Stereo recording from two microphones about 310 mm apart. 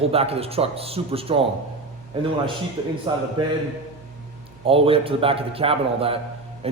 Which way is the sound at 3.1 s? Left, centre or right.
Centre.